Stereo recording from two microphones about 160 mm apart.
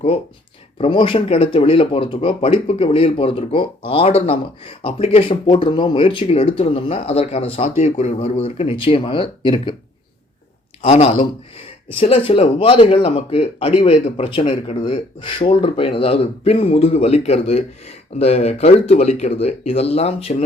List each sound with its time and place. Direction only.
0.8 s speech: 30° left (ahead or behind)
10.8 s speech: 40° left (ahead or behind)